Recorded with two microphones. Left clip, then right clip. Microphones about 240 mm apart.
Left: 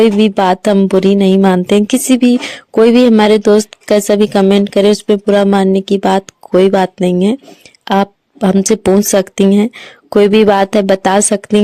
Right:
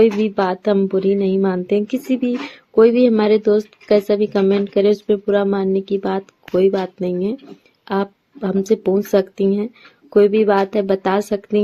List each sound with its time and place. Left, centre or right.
0.0 s speech: left